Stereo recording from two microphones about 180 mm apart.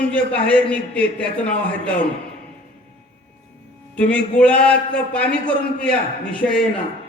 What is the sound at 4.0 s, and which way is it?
A man's voice, 5° left (ahead or behind).